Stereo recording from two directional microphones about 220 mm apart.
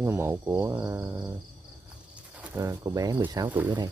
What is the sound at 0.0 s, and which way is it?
Speech, 10° right (ahead or behind).